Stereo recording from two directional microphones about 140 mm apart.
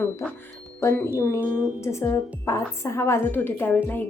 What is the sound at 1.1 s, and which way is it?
Speech, 20° left (ahead or behind).